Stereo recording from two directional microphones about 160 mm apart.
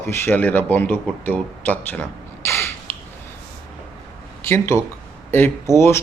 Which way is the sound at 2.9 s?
10° left (ahead or behind).